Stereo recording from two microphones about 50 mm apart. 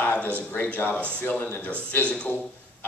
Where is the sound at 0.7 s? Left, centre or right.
Left.